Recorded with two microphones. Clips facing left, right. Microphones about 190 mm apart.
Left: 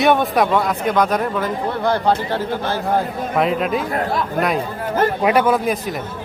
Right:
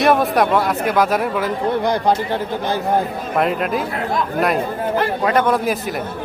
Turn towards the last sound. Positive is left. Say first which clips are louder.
# left 1 dB
turn(degrees=0)  # may be behind; listen again after turning